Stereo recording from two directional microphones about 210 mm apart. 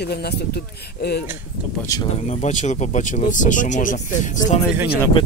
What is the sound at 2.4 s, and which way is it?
Speech, 35° left (ahead or behind).